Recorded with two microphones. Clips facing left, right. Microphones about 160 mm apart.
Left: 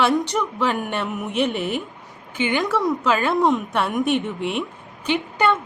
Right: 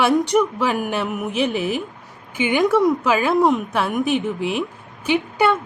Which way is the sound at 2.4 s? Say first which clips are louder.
Right 4 dB; 15° right (ahead or behind).